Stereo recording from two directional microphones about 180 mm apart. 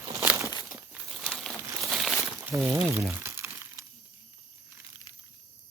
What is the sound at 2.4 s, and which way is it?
Speech, 10° right (ahead or behind).